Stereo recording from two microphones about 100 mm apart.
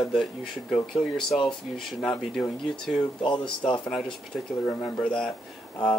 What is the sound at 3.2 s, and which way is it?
Speech, 55° left (ahead or behind).